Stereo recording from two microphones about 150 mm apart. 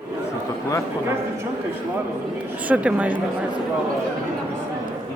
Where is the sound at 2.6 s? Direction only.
10° right (ahead or behind).